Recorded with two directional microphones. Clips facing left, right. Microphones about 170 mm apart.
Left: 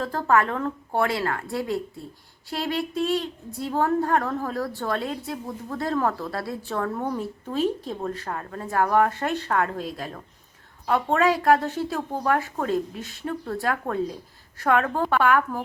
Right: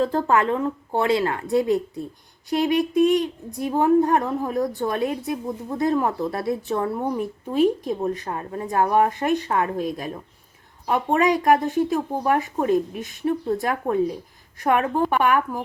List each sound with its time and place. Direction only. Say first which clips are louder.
0.0 s speech: right 2 dB; 20° right (ahead or behind)